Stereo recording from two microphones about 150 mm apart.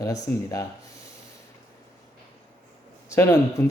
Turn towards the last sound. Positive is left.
turn(degrees=20)  # may be behind; listen again after turning